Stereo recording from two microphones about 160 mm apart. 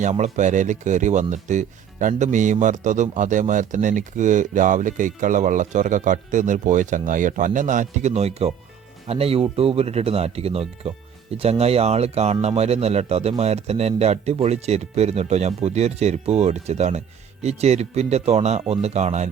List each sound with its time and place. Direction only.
0.0 s speech: 50° right (ahead or behind)